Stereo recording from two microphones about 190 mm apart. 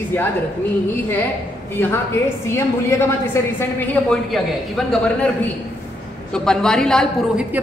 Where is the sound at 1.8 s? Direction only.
10° left (ahead or behind).